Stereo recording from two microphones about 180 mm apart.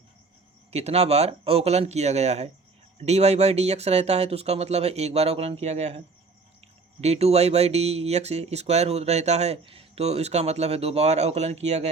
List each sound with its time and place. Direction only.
0.7 s speech: 35° right (ahead or behind)
7.0 s speech: 35° right (ahead or behind)